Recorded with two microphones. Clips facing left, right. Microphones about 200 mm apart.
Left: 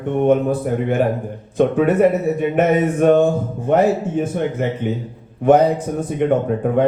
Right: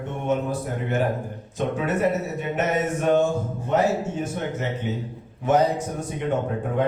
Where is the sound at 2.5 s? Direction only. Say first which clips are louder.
Left 7 dB; 55° left (ahead or behind).